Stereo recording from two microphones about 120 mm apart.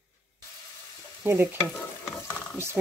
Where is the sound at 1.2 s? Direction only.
15° right (ahead or behind).